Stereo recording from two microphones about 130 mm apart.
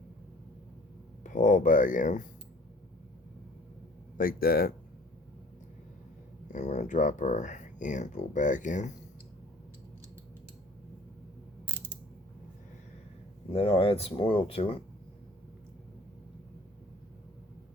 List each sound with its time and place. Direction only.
1.2 s speech: 75° left (ahead or behind)
4.2 s speech: 90° left
6.5 s speech: 70° left (ahead or behind)
13.5 s speech: 45° left (ahead or behind)